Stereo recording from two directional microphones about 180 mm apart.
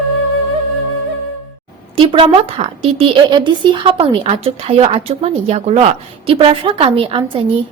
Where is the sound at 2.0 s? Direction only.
35° right (ahead or behind).